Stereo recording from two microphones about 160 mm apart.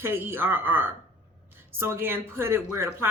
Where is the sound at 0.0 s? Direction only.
15° right (ahead or behind).